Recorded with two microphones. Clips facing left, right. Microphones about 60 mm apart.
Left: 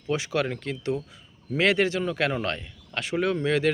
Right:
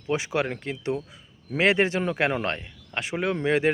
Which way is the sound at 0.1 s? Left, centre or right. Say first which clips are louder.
Even; right.